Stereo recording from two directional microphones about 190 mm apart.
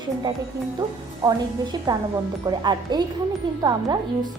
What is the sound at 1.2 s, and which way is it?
A woman's voice, 20° right (ahead or behind).